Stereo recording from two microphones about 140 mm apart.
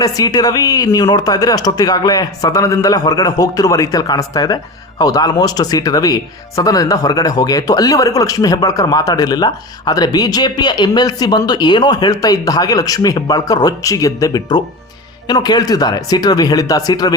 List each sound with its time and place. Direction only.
0.0 s speech: 25° left (ahead or behind)